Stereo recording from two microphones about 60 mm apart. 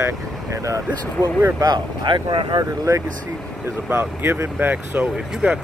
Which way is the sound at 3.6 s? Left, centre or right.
Right.